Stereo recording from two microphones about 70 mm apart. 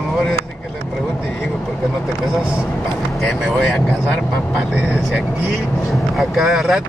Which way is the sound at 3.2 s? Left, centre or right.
Centre.